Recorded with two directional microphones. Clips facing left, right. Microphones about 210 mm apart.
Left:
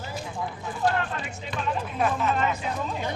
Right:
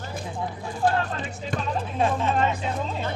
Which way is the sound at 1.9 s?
30° right (ahead or behind).